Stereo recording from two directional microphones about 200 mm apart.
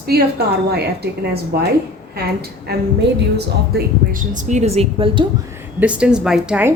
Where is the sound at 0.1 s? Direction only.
50° right (ahead or behind).